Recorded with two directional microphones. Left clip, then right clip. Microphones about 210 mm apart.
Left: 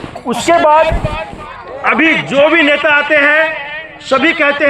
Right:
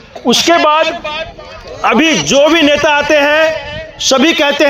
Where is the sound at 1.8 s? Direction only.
60° right (ahead or behind).